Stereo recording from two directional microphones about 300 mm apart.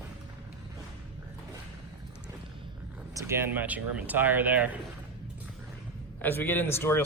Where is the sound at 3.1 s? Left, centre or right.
Centre.